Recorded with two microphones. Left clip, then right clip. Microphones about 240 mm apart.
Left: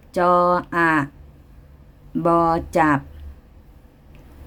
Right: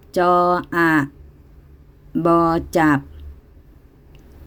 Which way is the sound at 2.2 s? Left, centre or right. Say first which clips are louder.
Right 1 dB; centre.